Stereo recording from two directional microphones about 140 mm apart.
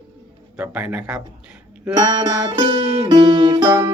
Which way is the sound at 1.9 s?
30° right (ahead or behind).